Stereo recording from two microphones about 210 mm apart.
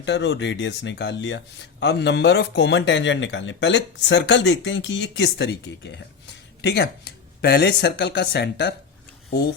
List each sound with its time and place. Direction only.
0.0 s speech: 55° left (ahead or behind)